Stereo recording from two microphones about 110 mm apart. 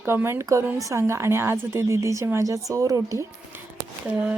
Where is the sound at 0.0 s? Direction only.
20° right (ahead or behind).